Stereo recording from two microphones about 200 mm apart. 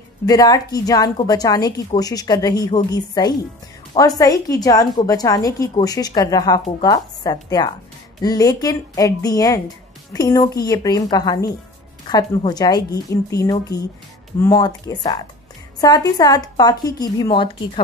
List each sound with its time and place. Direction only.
0.3 s a woman's voice: 20° left (ahead or behind)